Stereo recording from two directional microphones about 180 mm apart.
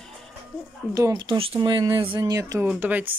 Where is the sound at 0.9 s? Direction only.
15° right (ahead or behind).